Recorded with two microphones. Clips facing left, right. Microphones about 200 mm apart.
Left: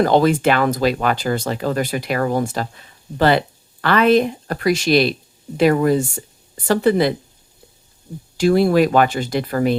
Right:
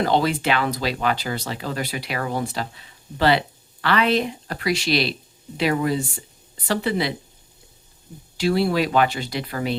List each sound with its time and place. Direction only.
0.0 s speech: 50° left (ahead or behind)
8.4 s speech: 50° left (ahead or behind)